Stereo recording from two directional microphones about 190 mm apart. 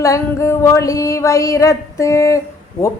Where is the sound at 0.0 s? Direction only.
15° left (ahead or behind).